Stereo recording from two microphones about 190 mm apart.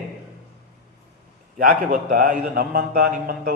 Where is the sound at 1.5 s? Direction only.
50° right (ahead or behind).